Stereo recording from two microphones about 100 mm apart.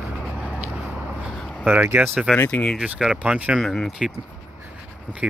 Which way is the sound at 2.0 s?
15° right (ahead or behind).